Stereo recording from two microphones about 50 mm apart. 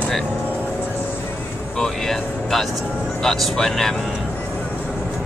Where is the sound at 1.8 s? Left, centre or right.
Centre.